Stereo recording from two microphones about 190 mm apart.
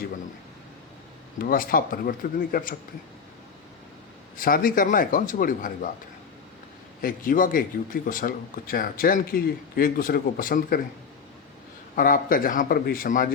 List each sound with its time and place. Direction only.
1.4 s a man's voice: 50° left (ahead or behind)
4.4 s a man's voice: 50° left (ahead or behind)
7.0 s a man's voice: 45° left (ahead or behind)
11.9 s a man's voice: 50° left (ahead or behind)